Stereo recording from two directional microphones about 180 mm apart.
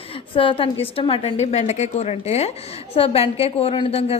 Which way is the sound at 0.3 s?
30° left (ahead or behind).